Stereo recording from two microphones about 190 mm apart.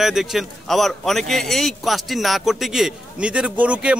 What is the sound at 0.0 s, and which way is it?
Speech, centre (ahead or behind).